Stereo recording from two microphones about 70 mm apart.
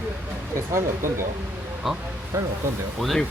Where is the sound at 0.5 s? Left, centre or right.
Right.